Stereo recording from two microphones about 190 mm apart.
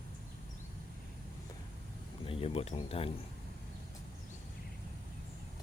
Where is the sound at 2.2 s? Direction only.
30° left (ahead or behind).